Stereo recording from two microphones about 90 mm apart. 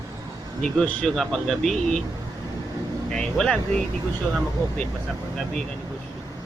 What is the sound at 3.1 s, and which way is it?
Speech, 5° left (ahead or behind).